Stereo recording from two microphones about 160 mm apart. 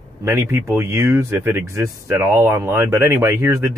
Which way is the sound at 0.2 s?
15° right (ahead or behind).